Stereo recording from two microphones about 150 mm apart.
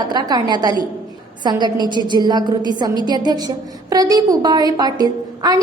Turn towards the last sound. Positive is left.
turn(degrees=-25)  # may be behind; listen again after turning